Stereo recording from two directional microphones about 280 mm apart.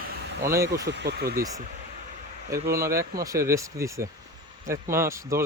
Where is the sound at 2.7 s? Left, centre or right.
Centre.